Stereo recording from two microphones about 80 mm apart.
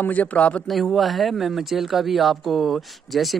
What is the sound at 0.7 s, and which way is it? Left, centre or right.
A man's voice, centre.